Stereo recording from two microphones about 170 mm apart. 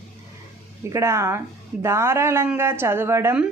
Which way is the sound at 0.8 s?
15° right (ahead or behind).